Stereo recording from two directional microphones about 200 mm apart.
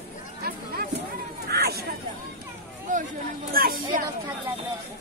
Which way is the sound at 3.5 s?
45° right (ahead or behind).